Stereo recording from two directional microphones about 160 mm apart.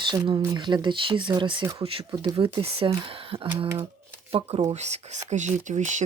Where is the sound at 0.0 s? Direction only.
30° right (ahead or behind).